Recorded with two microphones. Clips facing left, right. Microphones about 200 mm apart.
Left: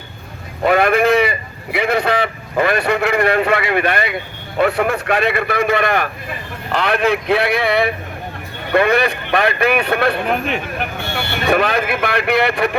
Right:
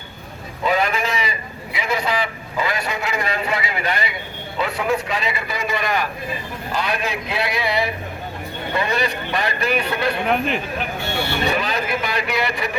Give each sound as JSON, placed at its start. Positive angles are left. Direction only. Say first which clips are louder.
{"t": 0.6, "sound": "a man's voice", "louder": "left 7 dB", "side_deg": 60}
{"t": 10.2, "sound": "speech", "louder": "left 1 dB", "side_deg": 0}
{"t": 11.4, "sound": "a man's voice", "louder": "left 11 dB", "side_deg": 60}